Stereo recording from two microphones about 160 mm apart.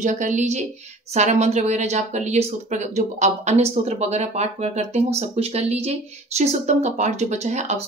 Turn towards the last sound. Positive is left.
turn(degrees=-45)  # may be behind; listen again after turning